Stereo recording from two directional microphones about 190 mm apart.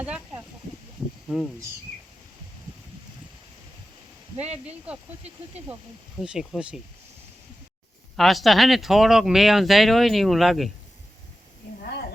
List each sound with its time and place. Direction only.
0.0 s a sound: 10° right (ahead or behind)
6.1 s speech: centre (ahead or behind)
8.1 s speech: centre (ahead or behind)
11.8 s snake: 55° left (ahead or behind)